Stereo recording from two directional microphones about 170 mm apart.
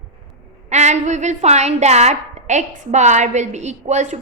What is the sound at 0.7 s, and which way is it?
A woman's voice, 40° right (ahead or behind).